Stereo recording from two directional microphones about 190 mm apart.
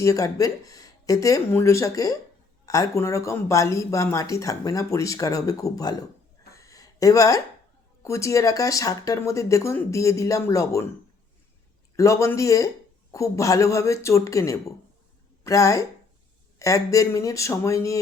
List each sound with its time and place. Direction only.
0.0 s speech: 15° left (ahead or behind)
6.5 s a sound: 15° left (ahead or behind)
8.0 s speech: 15° left (ahead or behind)
11.9 s speech: 15° left (ahead or behind)